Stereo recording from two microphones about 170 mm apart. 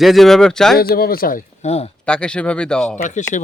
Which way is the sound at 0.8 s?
60° left (ahead or behind).